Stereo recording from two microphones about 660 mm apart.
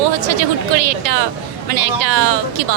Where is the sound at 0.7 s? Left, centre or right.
Right.